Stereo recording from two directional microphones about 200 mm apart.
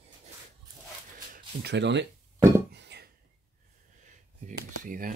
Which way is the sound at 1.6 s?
60° right (ahead or behind).